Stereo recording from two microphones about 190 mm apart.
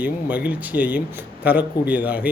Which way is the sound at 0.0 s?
10° right (ahead or behind).